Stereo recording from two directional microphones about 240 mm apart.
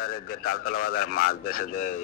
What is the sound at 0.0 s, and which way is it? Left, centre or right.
A man's voice, left.